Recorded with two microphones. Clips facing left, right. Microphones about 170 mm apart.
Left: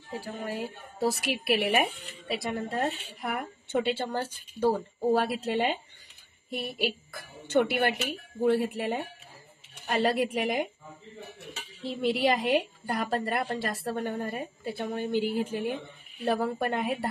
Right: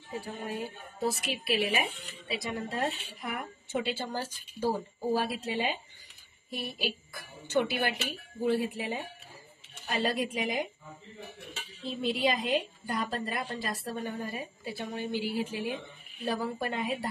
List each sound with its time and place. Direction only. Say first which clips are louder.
0.2 s speech: left 3 dB; 85° left
1.1 s a woman's voice: left 3 dB; 70° left (ahead or behind)
6.8 s a woman's voice: left 4 dB; 55° left (ahead or behind)
11.8 s a woman's voice: left 3 dB; 70° left (ahead or behind)